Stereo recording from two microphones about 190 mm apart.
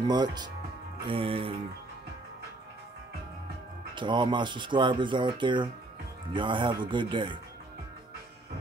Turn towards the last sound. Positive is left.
turn(degrees=-25)  # may be behind; listen again after turning